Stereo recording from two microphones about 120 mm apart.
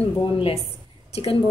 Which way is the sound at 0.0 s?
50° left (ahead or behind).